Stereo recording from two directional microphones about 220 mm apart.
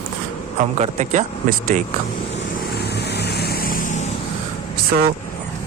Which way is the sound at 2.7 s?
50° left (ahead or behind).